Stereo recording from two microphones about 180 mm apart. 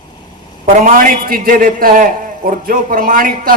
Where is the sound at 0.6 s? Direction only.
50° right (ahead or behind).